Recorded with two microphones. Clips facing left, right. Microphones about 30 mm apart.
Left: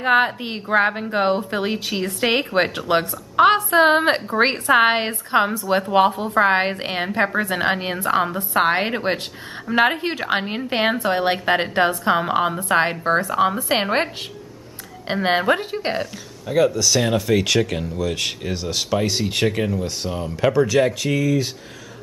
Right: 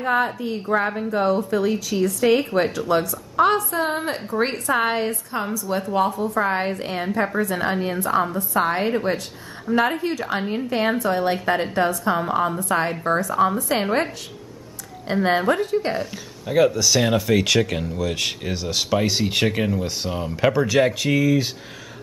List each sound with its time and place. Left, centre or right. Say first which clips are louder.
0.0 s a woman's voice: left 4 dB; left
15.2 s a woman's voice: left 1 dB; left
16.4 s speech: even; centre